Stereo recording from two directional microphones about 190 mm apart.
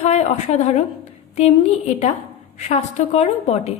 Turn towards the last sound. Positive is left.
turn(degrees=35)  # may be behind; listen again after turning